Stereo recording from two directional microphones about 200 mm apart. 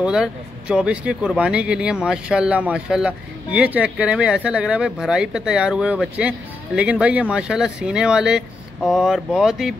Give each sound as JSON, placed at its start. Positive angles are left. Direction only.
{"t": 0.0, "sound": "speech", "side_deg": -5}